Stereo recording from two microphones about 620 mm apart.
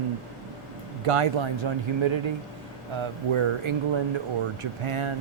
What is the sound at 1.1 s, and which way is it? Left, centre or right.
Speech, right.